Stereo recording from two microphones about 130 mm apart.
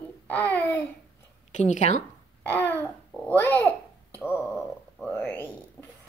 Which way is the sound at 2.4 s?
15° left (ahead or behind).